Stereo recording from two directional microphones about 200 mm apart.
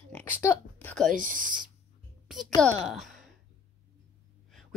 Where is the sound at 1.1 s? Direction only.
40° right (ahead or behind).